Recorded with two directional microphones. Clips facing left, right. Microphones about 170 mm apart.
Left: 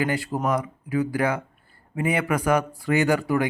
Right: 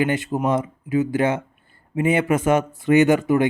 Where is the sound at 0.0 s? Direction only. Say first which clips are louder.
Right 4 dB; 20° right (ahead or behind).